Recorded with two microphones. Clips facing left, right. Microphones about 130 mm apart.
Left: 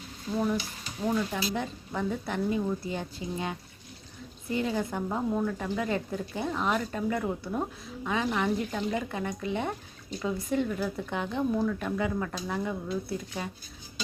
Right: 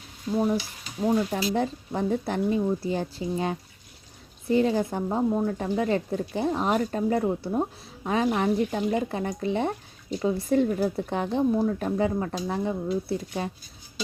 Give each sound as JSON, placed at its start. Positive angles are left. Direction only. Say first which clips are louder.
{"t": 0.3, "sound": "stir", "louder": "right 5 dB", "side_deg": 0}
{"t": 1.1, "sound": "speech", "louder": "right 5 dB", "side_deg": -35}
{"t": 5.0, "sound": "speech", "louder": "right 4 dB", "side_deg": -20}
{"t": 5.5, "sound": "speech", "louder": "right 5 dB", "side_deg": -35}